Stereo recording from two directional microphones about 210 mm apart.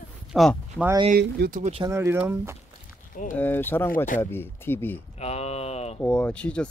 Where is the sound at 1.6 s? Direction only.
25° right (ahead or behind).